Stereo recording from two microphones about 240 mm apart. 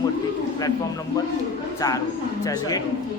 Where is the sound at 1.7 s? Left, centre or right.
Centre.